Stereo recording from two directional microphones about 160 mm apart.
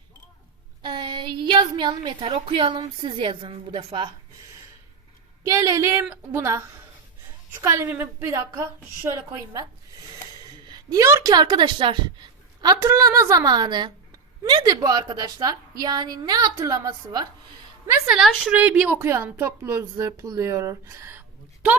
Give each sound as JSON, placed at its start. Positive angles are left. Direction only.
{"t": 0.8, "sound": "a woman's voice", "side_deg": -30}
{"t": 5.4, "sound": "a woman's voice", "side_deg": -20}
{"t": 18.1, "sound": "a woman's voice", "side_deg": 0}